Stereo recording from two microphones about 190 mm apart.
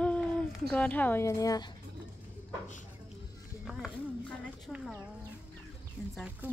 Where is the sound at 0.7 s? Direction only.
10° left (ahead or behind).